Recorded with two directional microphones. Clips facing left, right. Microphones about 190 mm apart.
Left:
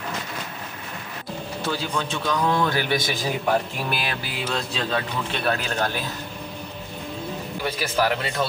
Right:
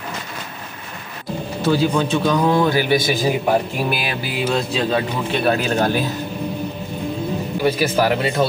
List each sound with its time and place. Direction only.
1.6 s a man's voice: 10° right (ahead or behind)
7.6 s speech: 10° right (ahead or behind)